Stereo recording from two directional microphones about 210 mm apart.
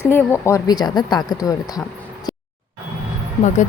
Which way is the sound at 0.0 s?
10° left (ahead or behind).